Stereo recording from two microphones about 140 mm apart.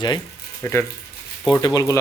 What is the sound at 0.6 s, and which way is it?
Speech, 20° left (ahead or behind).